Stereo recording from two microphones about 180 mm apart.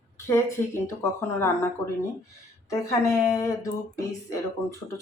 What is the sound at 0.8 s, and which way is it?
Speech, 15° left (ahead or behind).